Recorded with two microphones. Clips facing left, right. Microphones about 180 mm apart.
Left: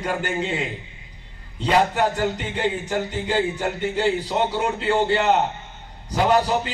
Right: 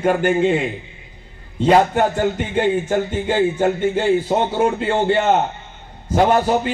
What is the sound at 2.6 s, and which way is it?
A man's voice, 50° right (ahead or behind).